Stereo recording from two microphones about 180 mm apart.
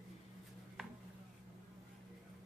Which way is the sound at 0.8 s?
Centre (ahead or behind).